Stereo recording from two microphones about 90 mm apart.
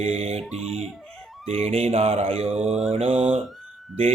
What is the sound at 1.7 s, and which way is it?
Mantra, 90° right.